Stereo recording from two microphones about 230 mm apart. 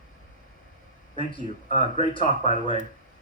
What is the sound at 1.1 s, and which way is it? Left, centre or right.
Speech, left.